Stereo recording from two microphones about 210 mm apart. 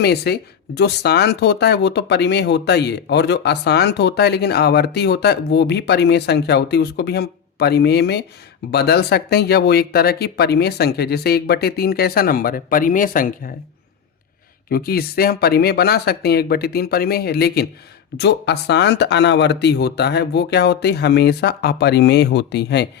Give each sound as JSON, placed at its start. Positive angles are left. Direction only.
{"t": 0.0, "sound": "speech", "side_deg": 50}
{"t": 14.7, "sound": "speech", "side_deg": 45}